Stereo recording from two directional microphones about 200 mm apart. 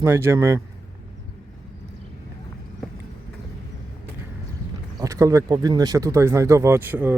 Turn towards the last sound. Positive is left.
turn(degrees=-10)  # may be behind; listen again after turning